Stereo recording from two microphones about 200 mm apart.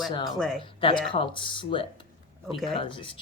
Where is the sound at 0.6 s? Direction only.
25° left (ahead or behind).